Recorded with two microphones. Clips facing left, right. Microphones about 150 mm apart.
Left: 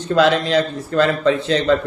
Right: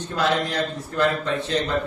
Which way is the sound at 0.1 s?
90° left.